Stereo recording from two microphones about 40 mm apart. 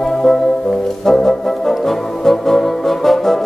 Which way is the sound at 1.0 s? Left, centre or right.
Centre.